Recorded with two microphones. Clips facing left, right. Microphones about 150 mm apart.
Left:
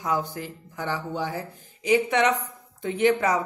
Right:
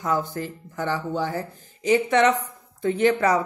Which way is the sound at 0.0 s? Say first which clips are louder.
Right 2 dB; 15° left (ahead or behind).